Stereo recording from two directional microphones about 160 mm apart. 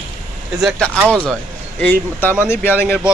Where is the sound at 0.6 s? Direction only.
Centre (ahead or behind).